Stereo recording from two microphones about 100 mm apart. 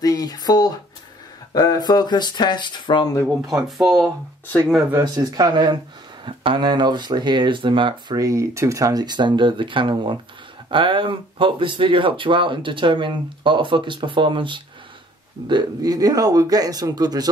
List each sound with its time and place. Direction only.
0.0 s speech: 40° left (ahead or behind)
3.6 s speech: centre (ahead or behind)
5.0 s speech: 40° right (ahead or behind); by 8.2 s 55° right (ahead or behind)
8.2 s speech: 30° right (ahead or behind); by 14.6 s 55° right (ahead or behind)
15.4 s speech: 45° right (ahead or behind)